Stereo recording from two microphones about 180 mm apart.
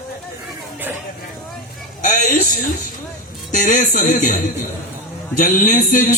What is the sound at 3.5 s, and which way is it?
Speech, 45° left (ahead or behind).